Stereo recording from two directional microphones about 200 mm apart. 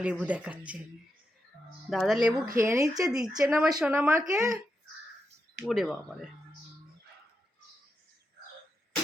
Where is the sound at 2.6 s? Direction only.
15° right (ahead or behind).